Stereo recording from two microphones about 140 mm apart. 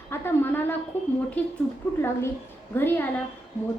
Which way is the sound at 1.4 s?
10° left (ahead or behind).